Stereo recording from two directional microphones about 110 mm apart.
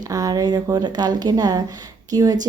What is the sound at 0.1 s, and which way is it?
A woman's voice, 30° right (ahead or behind).